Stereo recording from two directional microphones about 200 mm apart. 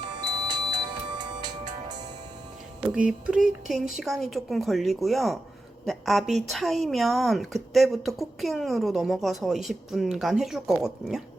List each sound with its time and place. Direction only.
0.0 s music: 20° right (ahead or behind)
2.9 s speech: 5° right (ahead or behind)